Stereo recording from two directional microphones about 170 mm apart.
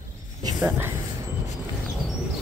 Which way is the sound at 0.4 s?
15° right (ahead or behind).